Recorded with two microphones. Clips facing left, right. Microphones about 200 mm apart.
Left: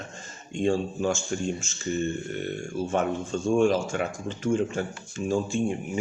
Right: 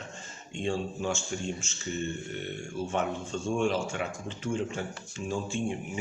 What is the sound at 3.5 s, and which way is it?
Speech, 45° left (ahead or behind).